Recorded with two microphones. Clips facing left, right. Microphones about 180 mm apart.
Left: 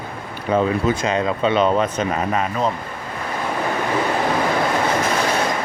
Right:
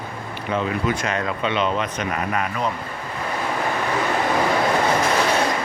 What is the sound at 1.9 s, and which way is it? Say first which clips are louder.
Speech: left 4 dB; 25° left (ahead or behind).